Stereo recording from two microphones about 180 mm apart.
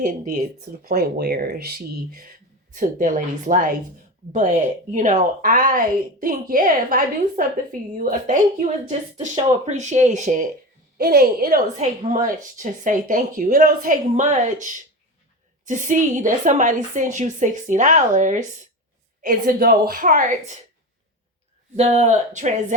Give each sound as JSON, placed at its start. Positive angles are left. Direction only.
{"t": 0.0, "sound": "a woman's voice", "side_deg": -50}
{"t": 0.9, "sound": "speech", "side_deg": -60}
{"t": 2.7, "sound": "a woman's voice", "side_deg": -45}
{"t": 9.6, "sound": "speech", "side_deg": -40}
{"t": 10.9, "sound": "a woman's voice", "side_deg": -60}
{"t": 21.8, "sound": "speech", "side_deg": -40}